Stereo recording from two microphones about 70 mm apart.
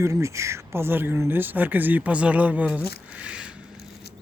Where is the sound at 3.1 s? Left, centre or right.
Centre.